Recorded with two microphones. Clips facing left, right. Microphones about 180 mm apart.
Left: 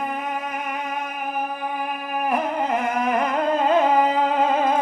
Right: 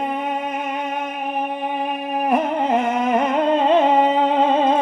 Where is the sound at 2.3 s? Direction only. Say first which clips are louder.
Right 4 dB; 25° right (ahead or behind).